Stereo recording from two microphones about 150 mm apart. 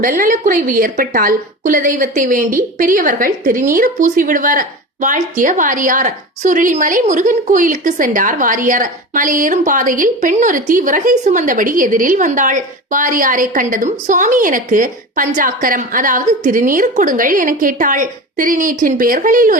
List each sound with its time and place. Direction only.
0.0 s a woman's voice: 65° right (ahead or behind)